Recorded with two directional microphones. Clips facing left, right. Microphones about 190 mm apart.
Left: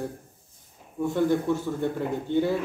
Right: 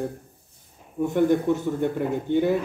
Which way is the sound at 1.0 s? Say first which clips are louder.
Right 3 dB; 20° right (ahead or behind).